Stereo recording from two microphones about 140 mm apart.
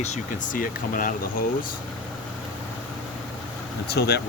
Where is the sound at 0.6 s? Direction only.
80° left.